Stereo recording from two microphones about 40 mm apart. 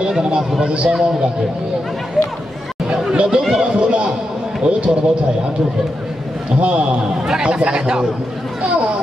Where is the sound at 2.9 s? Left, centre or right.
Right.